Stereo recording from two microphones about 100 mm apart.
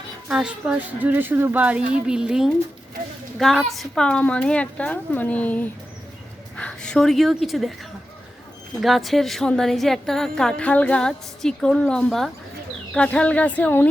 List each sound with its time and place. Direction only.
0.3 s speech: 10° right (ahead or behind); by 5.6 s 15° left (ahead or behind)
6.6 s a sound: 10° left (ahead or behind)
7.4 s a woman's voice: centre (ahead or behind)
8.8 s a woman's voice: centre (ahead or behind); by 13.9 s 15° left (ahead or behind)